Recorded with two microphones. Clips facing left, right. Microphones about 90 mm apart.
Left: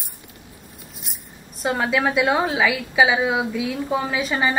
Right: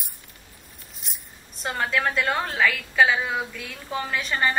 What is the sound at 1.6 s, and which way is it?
A woman's voice, 5° left (ahead or behind).